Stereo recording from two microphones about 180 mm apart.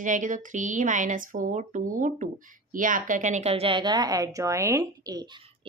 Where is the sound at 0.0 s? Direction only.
45° right (ahead or behind).